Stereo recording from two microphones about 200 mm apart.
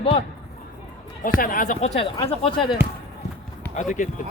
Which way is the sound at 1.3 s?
45° left (ahead or behind).